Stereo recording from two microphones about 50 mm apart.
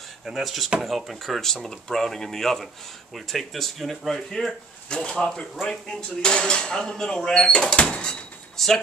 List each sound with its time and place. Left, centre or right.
0.2 s speech: centre
4.8 s speech: centre
7.6 s door: centre